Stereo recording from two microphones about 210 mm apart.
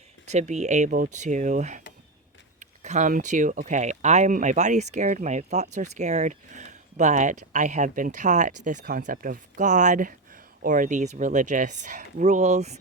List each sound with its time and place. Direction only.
0.3 s speech: 35° right (ahead or behind)